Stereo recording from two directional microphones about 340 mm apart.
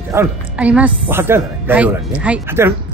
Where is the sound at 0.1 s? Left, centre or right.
Centre.